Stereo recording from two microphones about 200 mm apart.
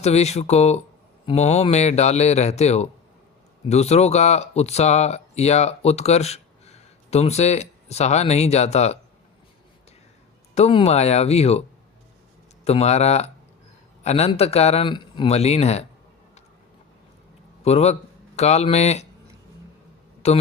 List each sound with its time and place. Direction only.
0.0 s a man's voice: 35° left (ahead or behind)
10.5 s a man's voice: 30° left (ahead or behind)
12.6 s a man's voice: 30° left (ahead or behind)
17.6 s a man's voice: 30° left (ahead or behind)
20.2 s a man's voice: 30° left (ahead or behind)